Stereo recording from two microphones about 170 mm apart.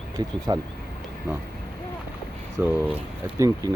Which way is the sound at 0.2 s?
20° right (ahead or behind).